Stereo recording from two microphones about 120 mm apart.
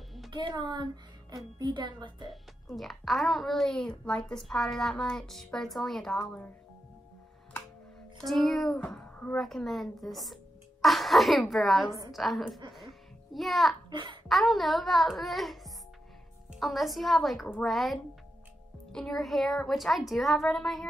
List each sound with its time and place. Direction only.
0.3 s a woman's voice: 40° right (ahead or behind)
2.2 s a child's voice: centre (ahead or behind)
8.2 s a child's voice: centre (ahead or behind)
8.9 s a woman's voice: 10° left (ahead or behind)
9.4 s a child's voice: centre (ahead or behind)
13.8 s babbling: 40° right (ahead or behind)
14.2 s a child's voice: centre (ahead or behind)